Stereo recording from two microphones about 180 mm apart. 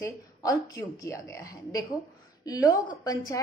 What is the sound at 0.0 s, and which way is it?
A woman's voice, 20° left (ahead or behind).